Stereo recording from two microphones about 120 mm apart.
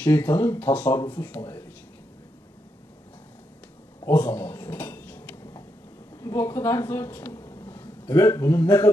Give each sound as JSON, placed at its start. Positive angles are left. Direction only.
{"t": 0.0, "sound": "speech", "side_deg": 15}
{"t": 4.1, "sound": "dishes", "side_deg": 15}
{"t": 6.1, "sound": "a sound", "side_deg": 20}
{"t": 8.1, "sound": "a man's voice", "side_deg": 25}